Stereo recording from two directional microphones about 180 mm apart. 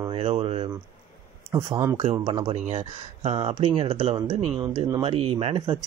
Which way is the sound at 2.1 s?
25° right (ahead or behind).